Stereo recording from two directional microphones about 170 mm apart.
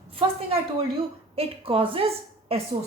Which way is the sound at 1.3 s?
35° right (ahead or behind).